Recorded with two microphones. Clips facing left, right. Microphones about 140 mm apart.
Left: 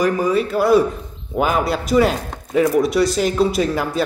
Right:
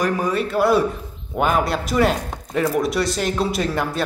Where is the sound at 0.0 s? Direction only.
Centre (ahead or behind).